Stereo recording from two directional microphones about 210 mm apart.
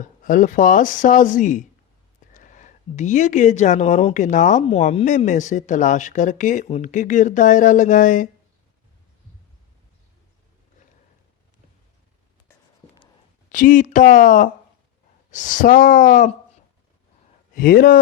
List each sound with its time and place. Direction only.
0.0 s speech: 40° left (ahead or behind)
13.5 s speech: 40° left (ahead or behind)
17.5 s speech: 45° left (ahead or behind)